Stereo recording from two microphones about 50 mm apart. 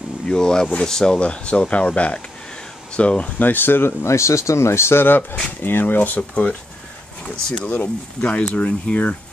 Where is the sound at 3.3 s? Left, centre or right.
Left.